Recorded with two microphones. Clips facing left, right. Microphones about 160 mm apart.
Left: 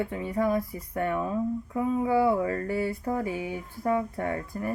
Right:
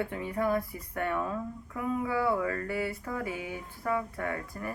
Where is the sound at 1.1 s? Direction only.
20° left (ahead or behind).